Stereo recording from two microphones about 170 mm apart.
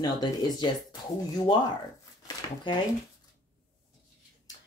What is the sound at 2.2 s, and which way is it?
Speech, 25° left (ahead or behind).